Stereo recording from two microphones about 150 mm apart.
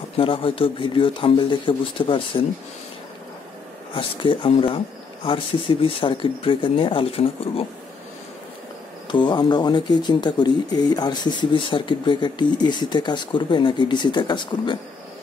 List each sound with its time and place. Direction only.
0.2 s speech: 35° left (ahead or behind)
3.9 s speech: 35° left (ahead or behind)
9.1 s speech: 30° left (ahead or behind)